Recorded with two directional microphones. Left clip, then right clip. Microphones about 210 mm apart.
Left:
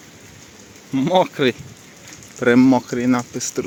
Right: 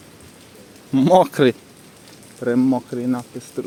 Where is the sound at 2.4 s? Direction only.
10° left (ahead or behind).